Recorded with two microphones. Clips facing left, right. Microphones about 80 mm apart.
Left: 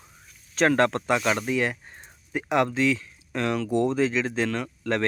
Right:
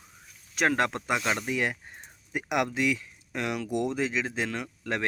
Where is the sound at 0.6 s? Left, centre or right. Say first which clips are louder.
Left 5 dB; centre.